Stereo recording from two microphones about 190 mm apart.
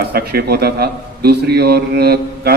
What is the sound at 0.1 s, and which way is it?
A man's voice, 55° right (ahead or behind).